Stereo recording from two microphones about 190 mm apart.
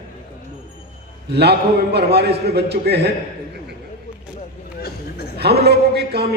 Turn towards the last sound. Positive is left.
turn(degrees=-60)  # may be behind; listen again after turning